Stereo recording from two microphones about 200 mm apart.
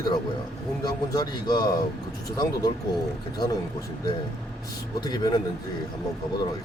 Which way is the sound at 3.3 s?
20° left (ahead or behind).